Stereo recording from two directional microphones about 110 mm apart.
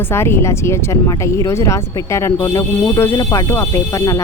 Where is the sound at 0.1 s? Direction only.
20° left (ahead or behind).